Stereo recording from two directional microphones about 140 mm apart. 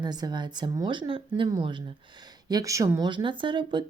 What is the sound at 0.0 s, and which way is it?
Speech, 30° right (ahead or behind).